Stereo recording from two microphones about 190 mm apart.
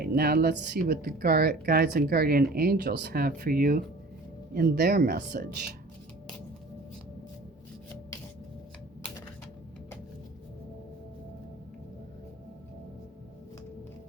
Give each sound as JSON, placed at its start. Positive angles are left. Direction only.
{"t": 0.0, "sound": "speech", "side_deg": -55}